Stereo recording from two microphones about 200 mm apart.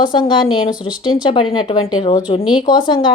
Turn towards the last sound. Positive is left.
turn(degrees=25)  # may be behind; listen again after turning